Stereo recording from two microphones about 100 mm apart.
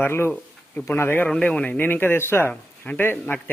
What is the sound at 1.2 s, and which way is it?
Speech, 10° left (ahead or behind).